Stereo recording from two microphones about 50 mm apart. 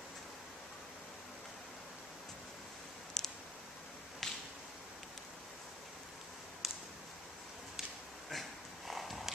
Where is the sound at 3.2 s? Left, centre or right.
Centre.